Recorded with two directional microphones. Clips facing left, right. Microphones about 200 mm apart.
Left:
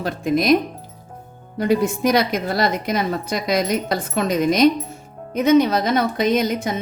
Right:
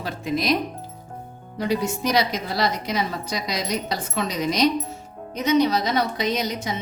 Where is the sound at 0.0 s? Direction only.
50° left (ahead or behind).